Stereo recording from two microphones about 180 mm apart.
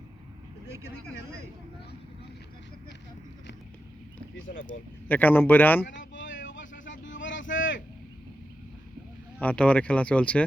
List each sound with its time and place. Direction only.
4.4 s speech: 90° left
5.0 s speech: 10° left (ahead or behind)
5.8 s vehicle: 90° left
9.4 s speech: 5° left (ahead or behind)